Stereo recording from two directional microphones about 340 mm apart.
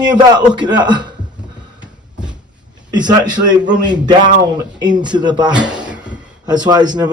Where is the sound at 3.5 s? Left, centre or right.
Centre.